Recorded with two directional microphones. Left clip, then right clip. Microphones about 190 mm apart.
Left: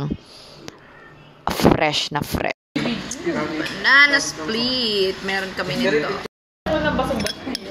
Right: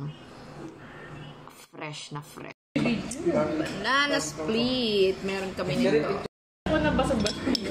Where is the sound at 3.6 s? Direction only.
5° right (ahead or behind).